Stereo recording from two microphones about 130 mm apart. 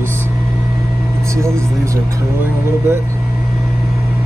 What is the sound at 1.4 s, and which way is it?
Vehicle, 20° right (ahead or behind).